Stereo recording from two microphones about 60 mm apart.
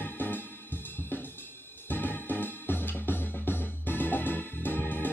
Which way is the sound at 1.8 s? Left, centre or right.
Left.